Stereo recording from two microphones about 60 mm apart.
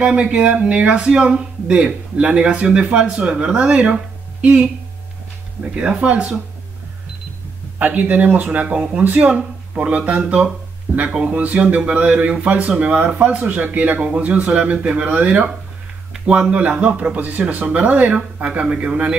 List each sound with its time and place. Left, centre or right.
0.0 s a man's voice: centre
5.8 s a man's voice: centre
7.8 s speech: right
10.9 s a sound: right
11.2 s speech: right